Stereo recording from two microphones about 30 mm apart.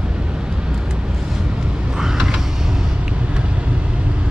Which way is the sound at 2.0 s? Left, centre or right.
Centre.